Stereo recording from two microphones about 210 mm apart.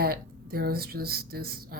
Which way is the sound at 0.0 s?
45° right (ahead or behind).